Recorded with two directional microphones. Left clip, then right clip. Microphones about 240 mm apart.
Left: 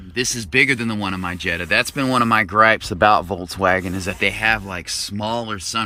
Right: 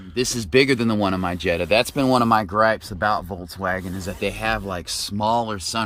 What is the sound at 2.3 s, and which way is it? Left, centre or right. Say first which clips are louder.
Speech: left 4 dB; centre.